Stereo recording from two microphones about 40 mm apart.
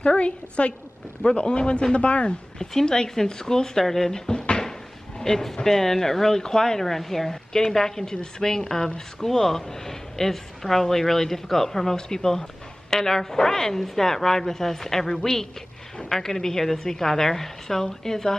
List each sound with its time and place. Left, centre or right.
0.0 s a man's voice: left
2.6 s speech: centre
4.3 s cupboard open or close: centre
5.2 s speech: centre